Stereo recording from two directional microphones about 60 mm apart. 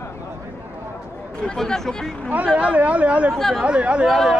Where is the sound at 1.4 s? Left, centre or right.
Centre.